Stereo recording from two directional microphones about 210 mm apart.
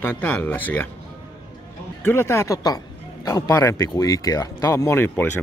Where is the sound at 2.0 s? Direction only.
10° left (ahead or behind).